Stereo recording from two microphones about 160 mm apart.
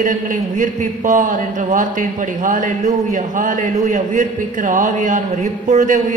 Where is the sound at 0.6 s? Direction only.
55° right (ahead or behind).